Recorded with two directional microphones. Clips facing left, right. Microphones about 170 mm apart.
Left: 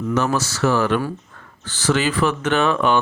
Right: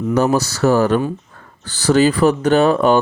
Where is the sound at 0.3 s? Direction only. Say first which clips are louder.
Right 5 dB; 35° right (ahead or behind).